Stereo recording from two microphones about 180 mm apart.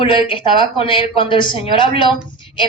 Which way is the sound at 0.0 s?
30° left (ahead or behind).